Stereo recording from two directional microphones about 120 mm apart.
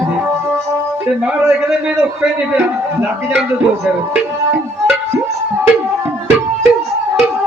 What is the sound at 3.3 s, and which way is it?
Speech, 10° right (ahead or behind).